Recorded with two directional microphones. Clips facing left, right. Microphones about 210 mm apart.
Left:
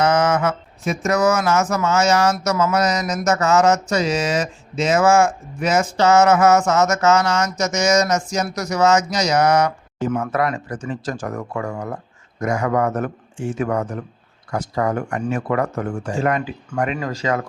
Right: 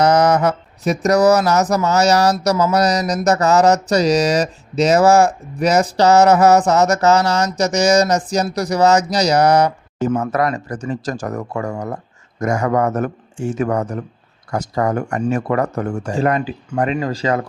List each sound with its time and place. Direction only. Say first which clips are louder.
0.0 s speech: right 4 dB; 35° right (ahead or behind)